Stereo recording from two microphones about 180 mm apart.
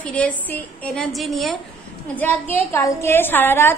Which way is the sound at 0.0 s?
5° left (ahead or behind).